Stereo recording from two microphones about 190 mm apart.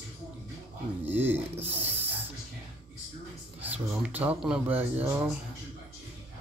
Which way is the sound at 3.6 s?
10° right (ahead or behind).